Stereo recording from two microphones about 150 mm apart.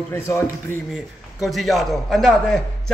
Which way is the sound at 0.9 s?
Centre (ahead or behind).